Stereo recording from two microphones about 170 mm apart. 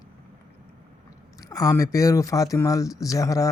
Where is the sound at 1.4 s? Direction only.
20° left (ahead or behind).